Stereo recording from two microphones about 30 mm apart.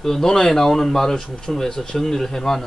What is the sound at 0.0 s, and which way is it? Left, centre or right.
A man's voice, centre.